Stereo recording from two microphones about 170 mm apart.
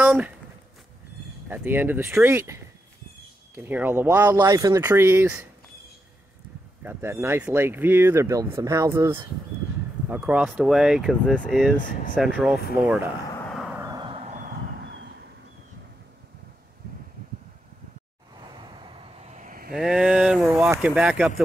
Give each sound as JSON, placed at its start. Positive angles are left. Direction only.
{"t": 0.0, "sound": "a sound", "side_deg": -10}
{"t": 1.5, "sound": "speech", "side_deg": -10}
{"t": 6.8, "sound": "speech", "side_deg": -10}
{"t": 13.5, "sound": "a sound", "side_deg": 0}
{"t": 13.7, "sound": "a sound", "side_deg": -20}
{"t": 14.8, "sound": "vehicle", "side_deg": -90}
{"t": 18.8, "sound": "vehicle", "side_deg": -30}
{"t": 19.3, "sound": "vehicle", "side_deg": -55}
{"t": 19.7, "sound": "speech", "side_deg": -5}